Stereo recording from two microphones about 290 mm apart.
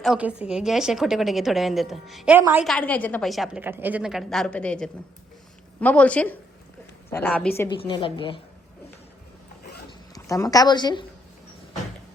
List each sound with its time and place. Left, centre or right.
0.0 s a woman's voice: centre
10.2 s a woman's voice: centre